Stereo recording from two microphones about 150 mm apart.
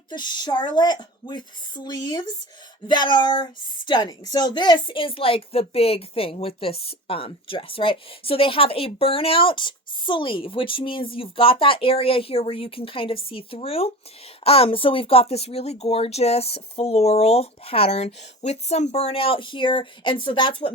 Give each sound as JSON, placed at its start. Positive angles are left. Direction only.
{"t": 0.1, "sound": "speech", "side_deg": 30}